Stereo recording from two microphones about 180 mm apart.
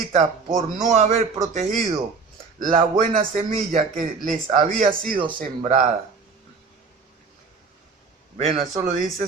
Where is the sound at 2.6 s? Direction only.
45° right (ahead or behind).